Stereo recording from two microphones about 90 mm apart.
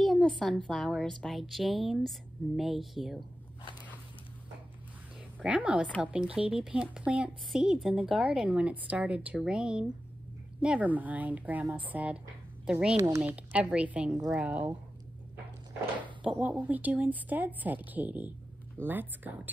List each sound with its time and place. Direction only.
0.0 s a sound: 5° left (ahead or behind)
0.7 s speech: centre (ahead or behind)
5.4 s a woman's voice: 15° right (ahead or behind)
7.5 s a woman's voice: 5° right (ahead or behind)
12.9 s speech: 40° right (ahead or behind)
13.2 s a woman's voice: 15° right (ahead or behind)
16.2 s speech: 15° right (ahead or behind)